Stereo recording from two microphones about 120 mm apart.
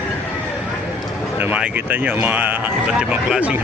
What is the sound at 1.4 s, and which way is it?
Speech, 10° right (ahead or behind).